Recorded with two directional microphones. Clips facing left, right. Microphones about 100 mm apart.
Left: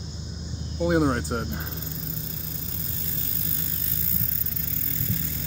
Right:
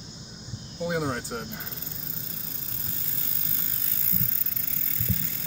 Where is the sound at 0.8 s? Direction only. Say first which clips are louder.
Left 6 dB; 55° left (ahead or behind).